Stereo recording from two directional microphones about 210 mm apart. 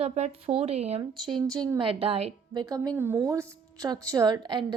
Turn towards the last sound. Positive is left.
turn(degrees=-20)  # may be behind; listen again after turning